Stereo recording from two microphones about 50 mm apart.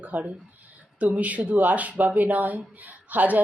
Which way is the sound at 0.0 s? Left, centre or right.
Right.